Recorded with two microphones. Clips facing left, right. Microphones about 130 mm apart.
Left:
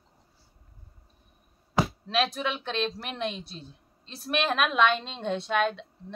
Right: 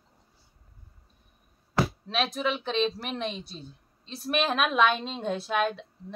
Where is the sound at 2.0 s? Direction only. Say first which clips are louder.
Left 1 dB; centre (ahead or behind).